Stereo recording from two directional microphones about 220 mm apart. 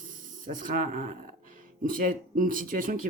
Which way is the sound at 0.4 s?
35° right (ahead or behind).